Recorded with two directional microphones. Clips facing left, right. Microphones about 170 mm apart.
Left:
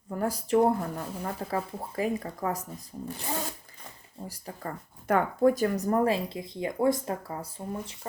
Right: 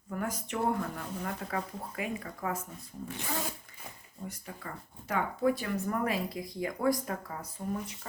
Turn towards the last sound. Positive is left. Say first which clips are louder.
# even
turn(degrees=30)  # may be behind; listen again after turning